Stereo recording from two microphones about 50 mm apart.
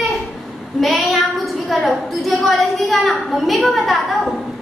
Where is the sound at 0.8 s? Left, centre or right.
Centre.